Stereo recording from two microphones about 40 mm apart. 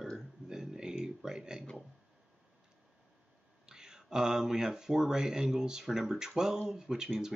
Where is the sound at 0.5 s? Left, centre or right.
Centre.